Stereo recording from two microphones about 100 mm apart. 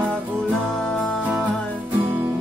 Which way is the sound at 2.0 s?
20° right (ahead or behind).